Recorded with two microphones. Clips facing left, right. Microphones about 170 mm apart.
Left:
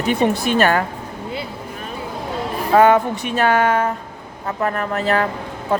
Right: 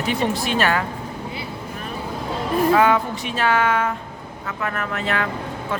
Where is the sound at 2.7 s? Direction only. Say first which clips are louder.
Left 7 dB; 45° left (ahead or behind).